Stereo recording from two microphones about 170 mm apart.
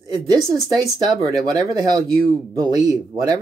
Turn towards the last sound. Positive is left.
turn(degrees=-25)  # may be behind; listen again after turning